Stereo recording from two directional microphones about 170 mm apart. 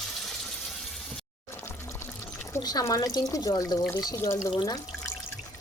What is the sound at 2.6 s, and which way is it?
Speech, 20° left (ahead or behind).